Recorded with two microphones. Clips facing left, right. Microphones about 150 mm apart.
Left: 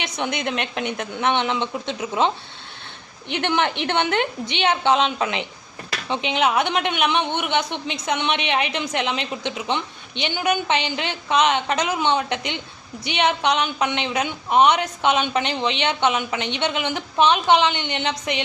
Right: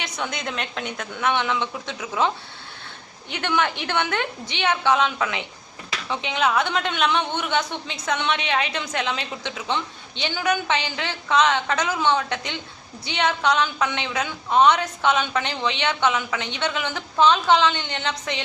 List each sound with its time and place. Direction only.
0.0 s a woman's voice: 20° left (ahead or behind)